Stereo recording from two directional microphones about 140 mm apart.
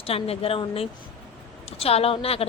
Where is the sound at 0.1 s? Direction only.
45° left (ahead or behind).